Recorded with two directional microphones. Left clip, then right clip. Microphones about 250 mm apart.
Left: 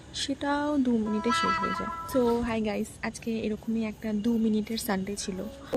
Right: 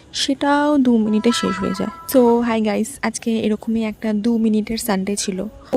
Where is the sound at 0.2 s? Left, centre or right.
Right.